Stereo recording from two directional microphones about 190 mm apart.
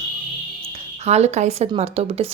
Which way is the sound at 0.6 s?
30° right (ahead or behind).